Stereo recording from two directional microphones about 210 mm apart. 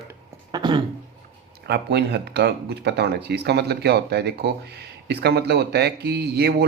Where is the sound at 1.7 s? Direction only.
50° right (ahead or behind).